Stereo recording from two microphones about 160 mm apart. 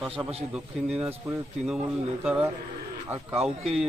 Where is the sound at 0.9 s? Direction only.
5° right (ahead or behind).